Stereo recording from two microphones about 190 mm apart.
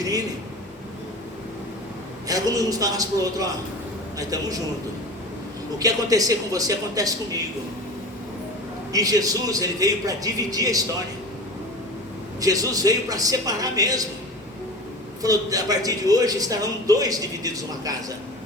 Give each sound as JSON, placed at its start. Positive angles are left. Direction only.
{"t": 2.2, "sound": "a man's voice", "side_deg": -20}
{"t": 5.8, "sound": "a man's voice", "side_deg": -20}
{"t": 8.9, "sound": "a man's voice", "side_deg": -20}
{"t": 12.4, "sound": "a man's voice", "side_deg": -20}
{"t": 15.2, "sound": "a man's voice", "side_deg": -20}